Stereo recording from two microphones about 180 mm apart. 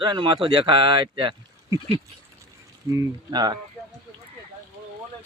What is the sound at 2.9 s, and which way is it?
Speech, 15° right (ahead or behind).